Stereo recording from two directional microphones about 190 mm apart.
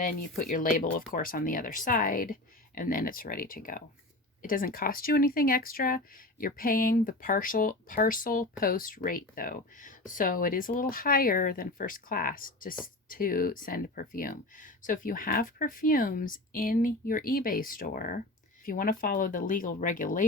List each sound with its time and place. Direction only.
0.0 s speech: 45° left (ahead or behind)